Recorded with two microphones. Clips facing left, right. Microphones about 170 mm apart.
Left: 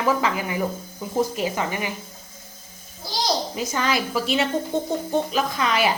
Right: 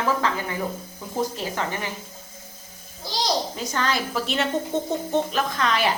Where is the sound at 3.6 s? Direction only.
10° left (ahead or behind).